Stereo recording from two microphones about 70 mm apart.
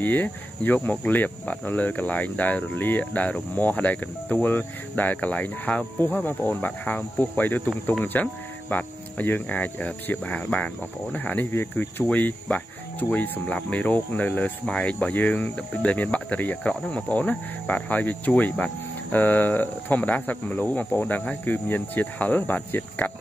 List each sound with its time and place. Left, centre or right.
0.0 s speech: left